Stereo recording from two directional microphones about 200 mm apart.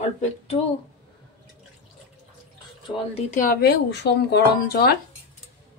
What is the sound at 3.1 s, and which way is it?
Speech, 40° left (ahead or behind).